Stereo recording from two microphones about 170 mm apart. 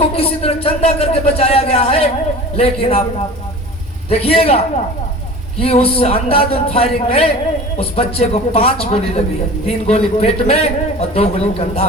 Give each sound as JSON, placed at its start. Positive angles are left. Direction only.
{"t": 0.0, "sound": "a man's voice", "side_deg": 35}
{"t": 4.1, "sound": "a man's voice", "side_deg": 35}